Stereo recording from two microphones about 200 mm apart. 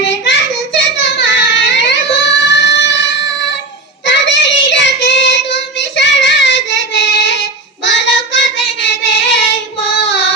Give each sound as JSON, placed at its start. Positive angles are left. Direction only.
{"t": 0.1, "sound": "child singing", "side_deg": 65}